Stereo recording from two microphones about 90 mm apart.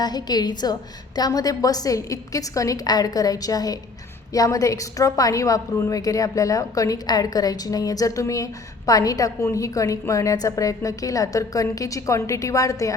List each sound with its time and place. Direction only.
0.0 s a woman's voice: 50° left (ahead or behind)